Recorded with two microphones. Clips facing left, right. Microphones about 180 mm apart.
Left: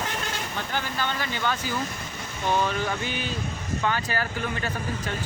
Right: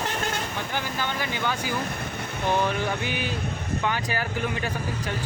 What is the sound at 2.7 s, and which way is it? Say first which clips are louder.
Speech: right 1 dB; 15° right (ahead or behind).